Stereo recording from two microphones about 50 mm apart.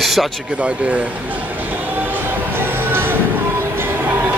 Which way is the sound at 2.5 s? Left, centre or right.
Right.